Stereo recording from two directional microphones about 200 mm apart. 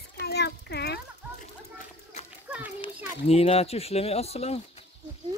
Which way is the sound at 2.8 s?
30° left (ahead or behind).